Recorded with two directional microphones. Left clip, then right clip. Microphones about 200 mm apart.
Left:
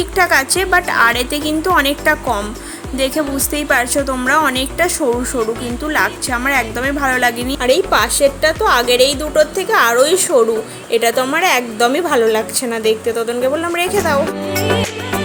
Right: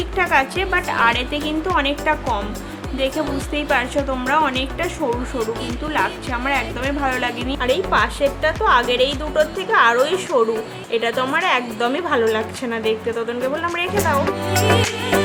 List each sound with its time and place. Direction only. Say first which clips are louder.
0.2 s a woman's voice: left 4 dB; 25° left (ahead or behind)
5.9 s a woman's voice: left 5 dB; 25° left (ahead or behind)
14.4 s music: left 1 dB; centre (ahead or behind)